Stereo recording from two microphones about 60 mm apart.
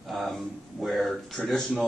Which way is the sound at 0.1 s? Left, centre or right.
Centre.